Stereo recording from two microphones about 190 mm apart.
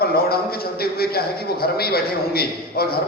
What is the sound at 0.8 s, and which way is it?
A man's voice, 55° left (ahead or behind).